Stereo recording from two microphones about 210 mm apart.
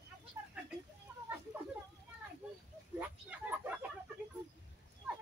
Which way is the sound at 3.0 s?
10° right (ahead or behind).